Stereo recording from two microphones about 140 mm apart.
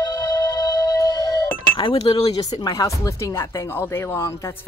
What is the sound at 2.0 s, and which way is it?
Cutlery, 45° left (ahead or behind).